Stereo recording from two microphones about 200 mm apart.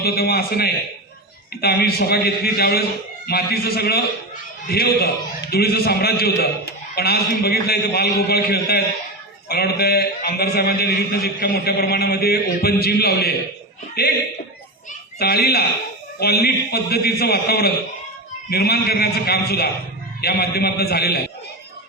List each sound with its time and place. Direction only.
0.0 s a man's voice: 50° left (ahead or behind)
15.2 s a man's voice: 50° left (ahead or behind)